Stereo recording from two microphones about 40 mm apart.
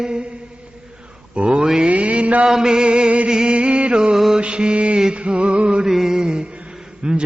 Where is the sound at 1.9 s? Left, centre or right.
Right.